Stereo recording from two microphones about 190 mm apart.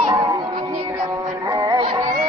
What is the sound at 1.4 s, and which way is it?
Music, 25° right (ahead or behind).